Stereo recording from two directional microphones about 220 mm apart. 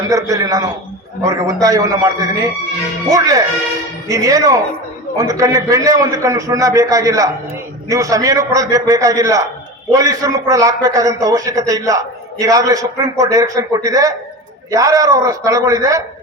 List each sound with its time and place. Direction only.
0.1 s a man's voice: 15° right (ahead or behind)